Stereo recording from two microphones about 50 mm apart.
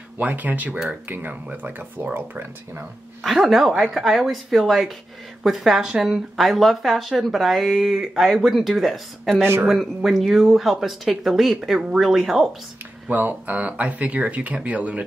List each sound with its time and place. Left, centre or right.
0.2 s speech: right
3.3 s speech: centre
6.3 s speech: centre
13.1 s speech: right